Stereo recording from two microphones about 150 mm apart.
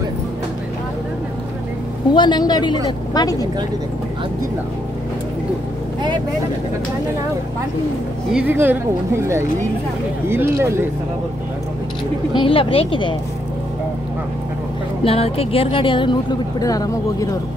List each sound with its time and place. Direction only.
2.1 s speech: 30° left (ahead or behind)
8.3 s speech: 10° right (ahead or behind)
12.4 s speech: 35° left (ahead or behind)
15.0 s speech: 40° left (ahead or behind); by 17.4 s 20° left (ahead or behind)